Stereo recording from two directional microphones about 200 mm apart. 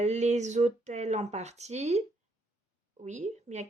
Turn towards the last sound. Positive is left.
turn(degrees=-35)  # may be behind; listen again after turning